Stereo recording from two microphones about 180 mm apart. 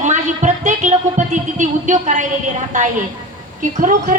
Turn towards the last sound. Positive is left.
turn(degrees=-50)  # may be behind; listen again after turning